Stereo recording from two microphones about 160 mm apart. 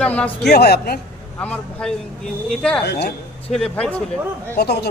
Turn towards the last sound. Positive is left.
turn(degrees=90)